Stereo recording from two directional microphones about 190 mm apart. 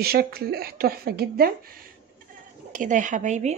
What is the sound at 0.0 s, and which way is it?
Speech, 55° right (ahead or behind).